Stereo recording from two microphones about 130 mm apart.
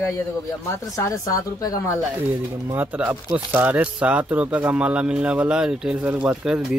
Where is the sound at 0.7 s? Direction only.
25° left (ahead or behind).